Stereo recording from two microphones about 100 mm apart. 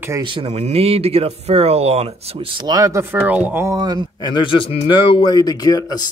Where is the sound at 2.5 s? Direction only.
40° right (ahead or behind).